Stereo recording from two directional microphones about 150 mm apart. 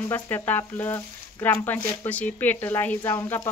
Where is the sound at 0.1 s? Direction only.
10° left (ahead or behind).